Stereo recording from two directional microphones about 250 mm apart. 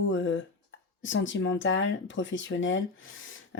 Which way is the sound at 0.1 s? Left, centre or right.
Left.